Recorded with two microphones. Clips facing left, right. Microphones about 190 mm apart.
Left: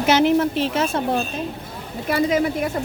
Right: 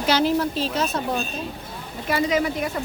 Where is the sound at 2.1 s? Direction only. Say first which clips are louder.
Left 2 dB; 50° left (ahead or behind).